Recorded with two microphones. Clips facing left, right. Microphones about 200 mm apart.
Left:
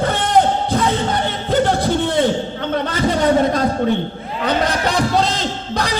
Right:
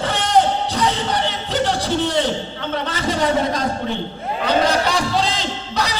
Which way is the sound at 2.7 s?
45° left (ahead or behind).